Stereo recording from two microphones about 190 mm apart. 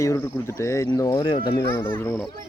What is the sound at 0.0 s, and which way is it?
Speech, 15° left (ahead or behind).